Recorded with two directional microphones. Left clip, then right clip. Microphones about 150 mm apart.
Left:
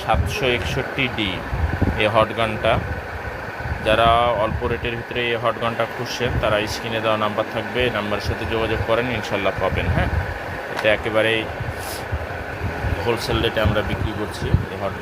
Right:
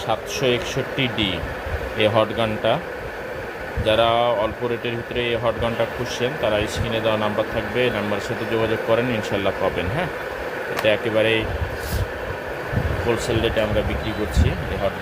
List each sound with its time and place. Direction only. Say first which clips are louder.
0.1 s speech: left 1 dB; 15° right (ahead or behind)
3.8 s speech: left 2 dB; 5° right (ahead or behind)
13.1 s speech: even; centre (ahead or behind)